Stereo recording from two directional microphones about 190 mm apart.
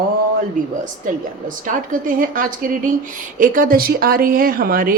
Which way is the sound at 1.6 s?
45° right (ahead or behind).